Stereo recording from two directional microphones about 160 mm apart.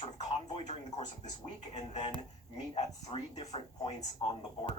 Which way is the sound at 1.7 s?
45° left (ahead or behind).